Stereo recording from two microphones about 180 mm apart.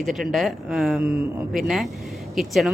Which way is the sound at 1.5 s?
Centre (ahead or behind).